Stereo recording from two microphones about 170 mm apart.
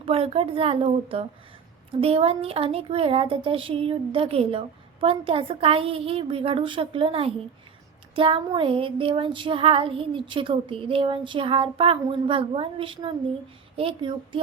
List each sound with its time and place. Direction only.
0.0 s speech: 35° right (ahead or behind)